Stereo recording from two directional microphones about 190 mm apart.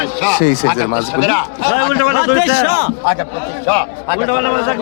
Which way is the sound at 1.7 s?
55° right (ahead or behind).